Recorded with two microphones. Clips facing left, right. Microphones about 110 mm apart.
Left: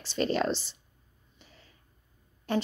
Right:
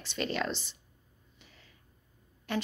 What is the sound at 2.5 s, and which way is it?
Speech, 35° left (ahead or behind).